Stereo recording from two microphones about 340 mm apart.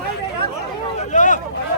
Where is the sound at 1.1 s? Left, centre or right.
Left.